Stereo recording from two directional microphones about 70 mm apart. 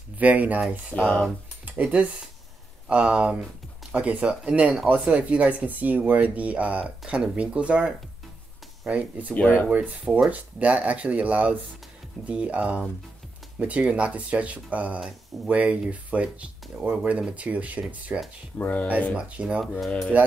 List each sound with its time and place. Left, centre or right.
0.2 s speech: right
0.9 s speech: centre
1.7 s speech: centre
9.3 s speech: left
9.7 s speech: right
18.6 s speech: left
19.1 s speech: centre